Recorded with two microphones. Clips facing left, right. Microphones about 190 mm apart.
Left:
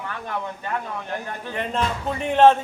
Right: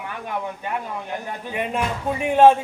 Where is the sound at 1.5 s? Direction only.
10° right (ahead or behind).